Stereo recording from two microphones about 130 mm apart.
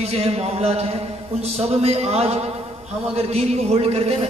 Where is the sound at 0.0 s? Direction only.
50° right (ahead or behind).